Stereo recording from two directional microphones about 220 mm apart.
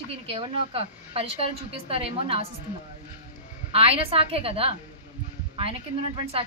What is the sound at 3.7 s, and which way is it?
A woman's voice, 25° right (ahead or behind).